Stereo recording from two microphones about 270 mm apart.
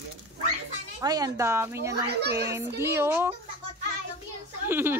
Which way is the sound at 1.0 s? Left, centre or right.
Centre.